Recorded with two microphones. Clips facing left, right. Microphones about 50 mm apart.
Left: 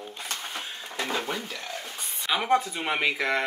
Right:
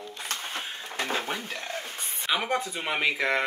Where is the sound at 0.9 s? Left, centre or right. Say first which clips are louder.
Even; right.